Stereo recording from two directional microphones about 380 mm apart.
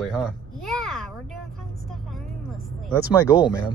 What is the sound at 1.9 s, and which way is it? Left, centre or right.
Vehicle, centre.